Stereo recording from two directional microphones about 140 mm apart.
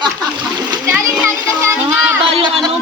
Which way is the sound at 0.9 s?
15° right (ahead or behind).